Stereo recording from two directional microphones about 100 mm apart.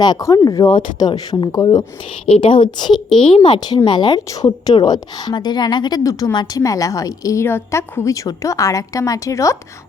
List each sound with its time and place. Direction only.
0.0 s a woman's voice: 40° left (ahead or behind)
2.3 s a woman's voice: 65° left (ahead or behind); by 3.0 s 45° left (ahead or behind)
3.2 s a woman's voice: 60° left (ahead or behind)
6.0 s a woman's voice: 35° left (ahead or behind)